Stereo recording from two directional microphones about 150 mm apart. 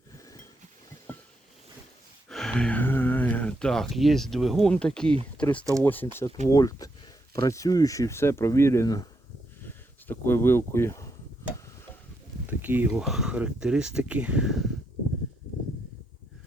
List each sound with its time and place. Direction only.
1.1 s a sound: 15° left (ahead or behind)
2.3 s speech: 5° left (ahead or behind)
6.1 s speech: 25° left (ahead or behind)
12.5 s speech: 10° right (ahead or behind)